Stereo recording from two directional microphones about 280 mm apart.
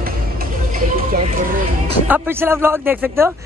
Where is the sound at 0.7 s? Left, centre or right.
Right.